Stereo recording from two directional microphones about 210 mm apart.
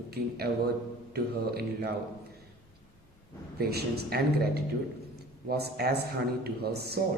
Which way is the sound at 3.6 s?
50° right (ahead or behind).